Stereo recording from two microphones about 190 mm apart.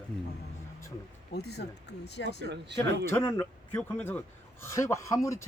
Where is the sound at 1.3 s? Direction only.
60° left (ahead or behind).